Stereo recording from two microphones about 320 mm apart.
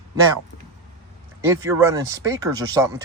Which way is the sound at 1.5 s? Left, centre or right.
Centre.